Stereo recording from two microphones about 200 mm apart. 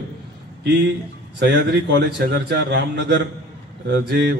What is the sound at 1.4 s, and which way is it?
A man's voice, 60° right (ahead or behind).